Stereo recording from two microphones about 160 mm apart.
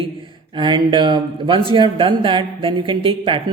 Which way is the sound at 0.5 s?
30° right (ahead or behind).